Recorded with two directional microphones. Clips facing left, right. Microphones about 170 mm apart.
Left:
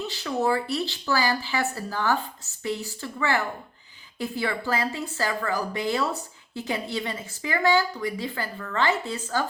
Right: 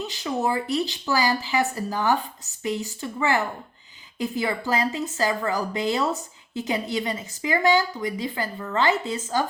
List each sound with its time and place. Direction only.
0.0 s a woman's voice: 15° right (ahead or behind)